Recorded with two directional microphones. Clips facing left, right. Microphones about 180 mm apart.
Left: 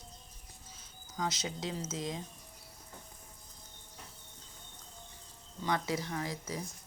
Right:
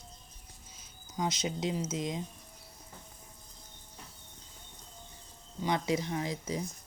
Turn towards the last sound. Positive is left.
turn(degrees=-20)  # may be behind; listen again after turning